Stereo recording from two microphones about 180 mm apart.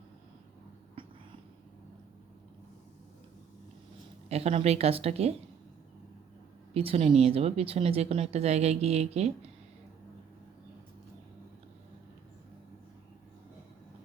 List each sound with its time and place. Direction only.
1.0 s a sound: 30° right (ahead or behind)
4.3 s speech: 35° right (ahead or behind)
6.7 s speech: 35° right (ahead or behind)